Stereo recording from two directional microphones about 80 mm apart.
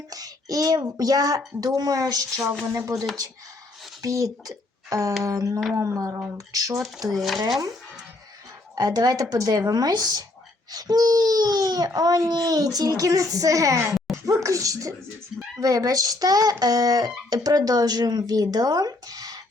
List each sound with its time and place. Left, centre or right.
0.1 s a sound: right
0.9 s speech: right
4.0 s speech: right
5.7 s a sound: right
6.3 s speech: right
7.1 s speech: centre
8.7 s speech: right